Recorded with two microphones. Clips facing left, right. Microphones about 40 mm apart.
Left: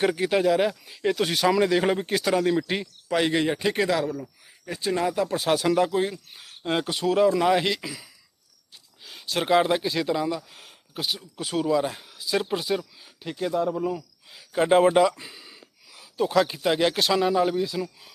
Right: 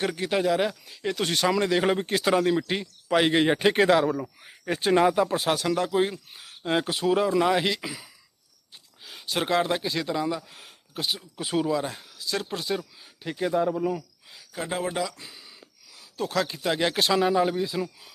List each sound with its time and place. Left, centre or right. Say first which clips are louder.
0.0 s speech: left 3 dB; centre
3.1 s speech: right 2 dB; centre
3.5 s speech: right 4 dB; right
4.6 s speech: right 5 dB; right
5.0 s speech: right 1 dB; centre
5.5 s speech: left 4 dB; centre
5.9 s speech: right 1 dB; centre
9.0 s a sound: left 1 dB; centre
9.5 s speech: left 5 dB; centre
11.6 s speech: left 3 dB; centre
13.2 s speech: right 1 dB; centre
14.5 s speech: left 11 dB; left
15.2 s a sound: left 2 dB; centre
16.1 s speech: left 5 dB; centre